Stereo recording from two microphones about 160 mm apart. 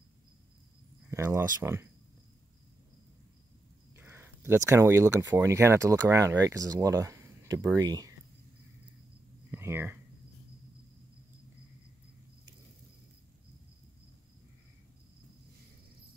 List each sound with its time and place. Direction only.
1.1 s speech: 15° right (ahead or behind)
3.9 s speech: 15° right (ahead or behind)
9.5 s a sound: 15° right (ahead or behind)